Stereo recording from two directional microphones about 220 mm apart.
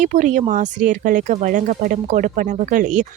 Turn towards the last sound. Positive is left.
turn(degrees=-35)  # may be behind; listen again after turning